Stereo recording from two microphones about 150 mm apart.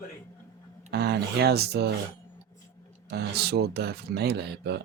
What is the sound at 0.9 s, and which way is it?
Speech, 90° right.